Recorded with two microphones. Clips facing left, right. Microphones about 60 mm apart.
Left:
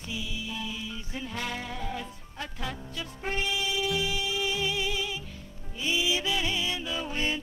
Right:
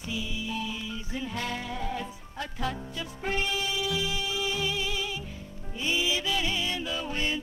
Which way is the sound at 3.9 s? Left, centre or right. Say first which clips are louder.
Left 1 dB; left.